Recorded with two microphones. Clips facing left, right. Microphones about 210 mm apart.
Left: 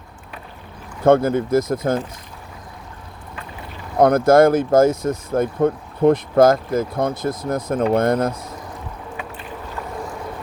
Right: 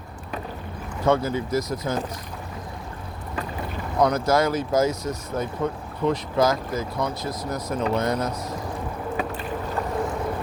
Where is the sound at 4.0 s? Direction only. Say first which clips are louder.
Left 8 dB; 55° left (ahead or behind).